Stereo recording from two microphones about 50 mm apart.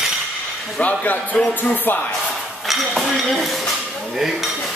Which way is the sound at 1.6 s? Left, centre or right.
Left.